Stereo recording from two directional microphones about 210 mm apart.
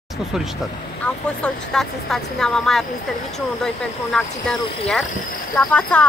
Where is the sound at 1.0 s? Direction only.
5° left (ahead or behind).